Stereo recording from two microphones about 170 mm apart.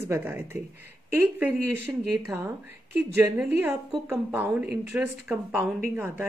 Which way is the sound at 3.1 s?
10° right (ahead or behind).